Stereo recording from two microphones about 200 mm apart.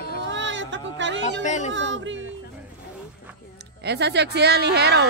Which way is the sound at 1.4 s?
35° left (ahead or behind).